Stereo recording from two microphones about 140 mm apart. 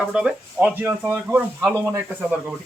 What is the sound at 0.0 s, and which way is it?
Speech, 5° right (ahead or behind).